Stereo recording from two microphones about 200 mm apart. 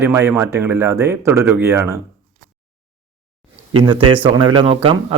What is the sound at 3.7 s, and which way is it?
Speech, 25° right (ahead or behind).